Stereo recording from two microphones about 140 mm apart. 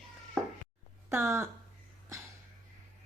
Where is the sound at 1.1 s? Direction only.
20° right (ahead or behind).